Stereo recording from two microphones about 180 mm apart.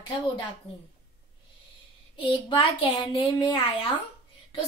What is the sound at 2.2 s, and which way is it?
A woman's voice, 30° left (ahead or behind).